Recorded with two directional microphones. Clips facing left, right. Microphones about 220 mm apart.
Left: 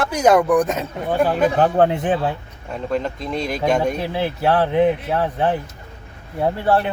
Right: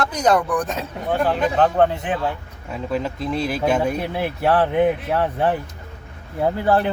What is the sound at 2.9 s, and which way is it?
Speech, 5° right (ahead or behind).